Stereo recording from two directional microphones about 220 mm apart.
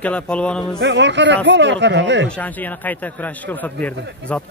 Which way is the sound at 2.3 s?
5° left (ahead or behind).